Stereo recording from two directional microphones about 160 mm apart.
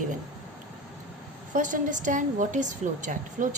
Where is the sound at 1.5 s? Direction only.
55° right (ahead or behind).